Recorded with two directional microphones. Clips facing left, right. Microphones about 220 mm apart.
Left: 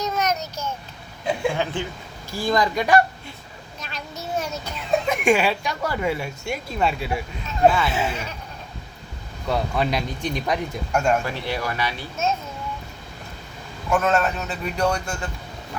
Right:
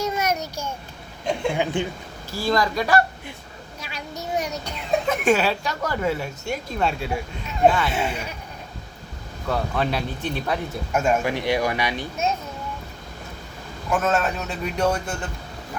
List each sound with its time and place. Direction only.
0.0 s child singing: 10° right (ahead or behind)
1.2 s speech: 5° left (ahead or behind)
1.5 s speech: 15° right (ahead or behind)
2.3 s speech: 15° left (ahead or behind)
3.8 s a sound: 10° right (ahead or behind)
4.6 s a man's voice: 10° left (ahead or behind)
9.5 s speech: 10° left (ahead or behind)
10.9 s a man's voice: 5° right (ahead or behind)
11.3 s speech: 15° right (ahead or behind)
13.9 s a man's voice: centre (ahead or behind)